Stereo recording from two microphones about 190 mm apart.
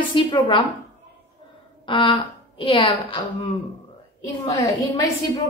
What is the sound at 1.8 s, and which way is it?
A woman's voice, 25° left (ahead or behind).